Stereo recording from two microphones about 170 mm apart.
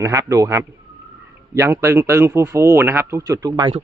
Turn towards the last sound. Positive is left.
turn(degrees=-25)  # may be behind; listen again after turning